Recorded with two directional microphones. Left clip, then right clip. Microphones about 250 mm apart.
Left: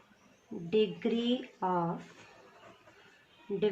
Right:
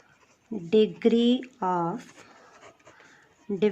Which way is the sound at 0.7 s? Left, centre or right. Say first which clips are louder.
Right 8 dB; right.